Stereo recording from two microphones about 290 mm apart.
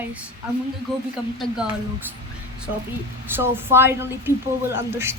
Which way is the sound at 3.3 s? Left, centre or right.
Centre.